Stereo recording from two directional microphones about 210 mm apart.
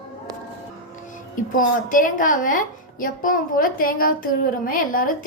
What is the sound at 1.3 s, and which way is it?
A woman's voice, 40° left (ahead or behind).